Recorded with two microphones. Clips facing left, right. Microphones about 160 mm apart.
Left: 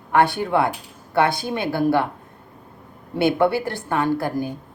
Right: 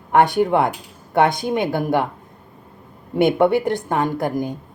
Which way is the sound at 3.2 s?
20° right (ahead or behind).